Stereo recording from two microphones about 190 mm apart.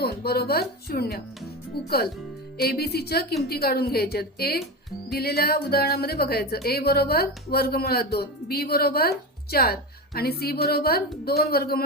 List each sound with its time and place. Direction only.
0.0 s a woman's voice: 55° left (ahead or behind)